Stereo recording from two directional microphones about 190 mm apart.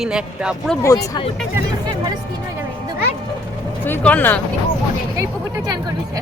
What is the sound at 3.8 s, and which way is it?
Speech, 10° left (ahead or behind).